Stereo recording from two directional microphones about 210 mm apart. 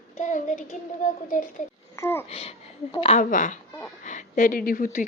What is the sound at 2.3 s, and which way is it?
A woman's voice, 30° left (ahead or behind).